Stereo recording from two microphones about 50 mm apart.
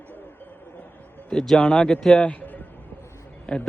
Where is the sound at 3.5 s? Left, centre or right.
Centre.